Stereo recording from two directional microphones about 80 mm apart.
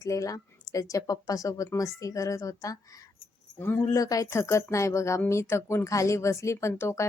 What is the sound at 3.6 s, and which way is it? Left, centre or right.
Speech, left.